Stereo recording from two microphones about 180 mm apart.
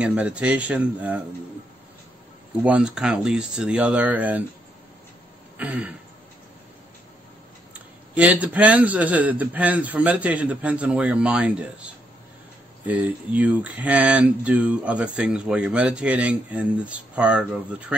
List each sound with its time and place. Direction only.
0.0 s a man's voice: 5° right (ahead or behind)
2.6 s speech: 5° right (ahead or behind)
5.6 s a man's voice: 10° right (ahead or behind)
8.1 s a man's voice: 10° right (ahead or behind)